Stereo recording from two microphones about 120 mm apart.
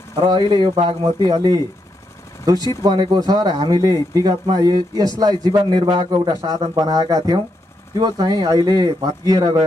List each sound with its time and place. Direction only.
0.1 s speech: 35° right (ahead or behind)